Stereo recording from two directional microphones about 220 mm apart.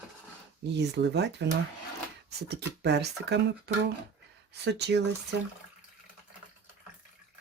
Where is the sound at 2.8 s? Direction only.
50° right (ahead or behind).